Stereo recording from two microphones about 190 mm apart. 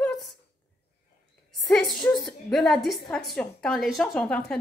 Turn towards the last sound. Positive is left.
turn(degrees=5)  # may be behind; listen again after turning